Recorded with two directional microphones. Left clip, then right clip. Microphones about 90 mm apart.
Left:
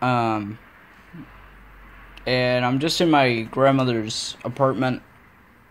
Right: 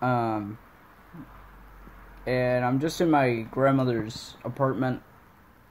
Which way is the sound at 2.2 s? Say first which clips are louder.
Left 4 dB; 10° left (ahead or behind).